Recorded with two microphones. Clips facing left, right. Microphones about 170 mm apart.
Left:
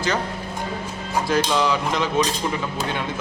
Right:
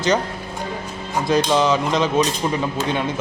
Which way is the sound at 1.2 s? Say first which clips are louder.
Right 4 dB; 20° right (ahead or behind).